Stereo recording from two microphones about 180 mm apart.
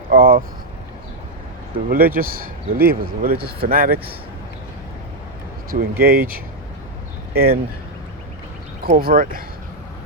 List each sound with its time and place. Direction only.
0.1 s speech: 50° right (ahead or behind)
1.7 s speech: 55° right (ahead or behind)
6.0 s speech: 55° right (ahead or behind)
8.8 s speech: 55° right (ahead or behind)